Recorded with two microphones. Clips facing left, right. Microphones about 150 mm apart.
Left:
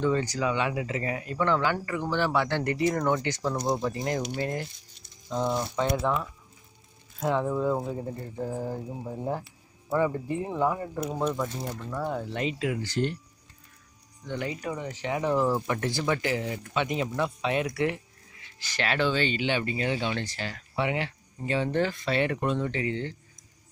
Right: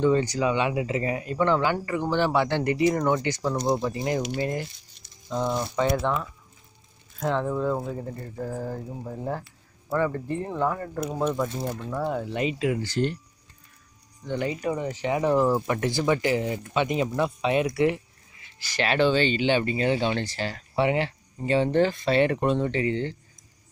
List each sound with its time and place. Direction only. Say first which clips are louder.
0.0 s speech: right 4 dB; 20° right (ahead or behind); by 11.1 s 15° left (ahead or behind)
11.1 s speech: right 3 dB; 5° right (ahead or behind)
11.8 s speech: right 2 dB; 20° right (ahead or behind)
12.1 s speech: right 3 dB; 5° right (ahead or behind)
12.6 s speech: right 3 dB; 35° right (ahead or behind)
14.2 s speech: right 5 dB; 30° right (ahead or behind)
15.0 s speech: right 3 dB; 15° right (ahead or behind); by 23.1 s 35° right (ahead or behind)